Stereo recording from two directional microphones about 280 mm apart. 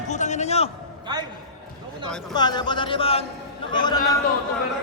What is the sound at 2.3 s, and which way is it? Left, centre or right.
A woman's voice, centre.